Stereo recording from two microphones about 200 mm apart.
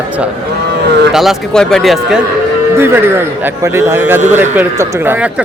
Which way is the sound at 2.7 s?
10° right (ahead or behind).